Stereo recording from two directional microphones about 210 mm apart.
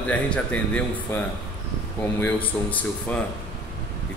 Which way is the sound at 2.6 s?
10° left (ahead or behind).